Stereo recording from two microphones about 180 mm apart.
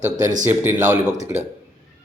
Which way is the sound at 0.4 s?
10° right (ahead or behind).